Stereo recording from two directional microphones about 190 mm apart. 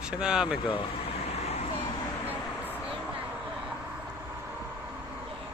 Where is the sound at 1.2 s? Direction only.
35° left (ahead or behind).